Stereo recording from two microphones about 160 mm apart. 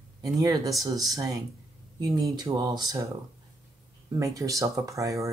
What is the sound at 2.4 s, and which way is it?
Speech, 25° right (ahead or behind).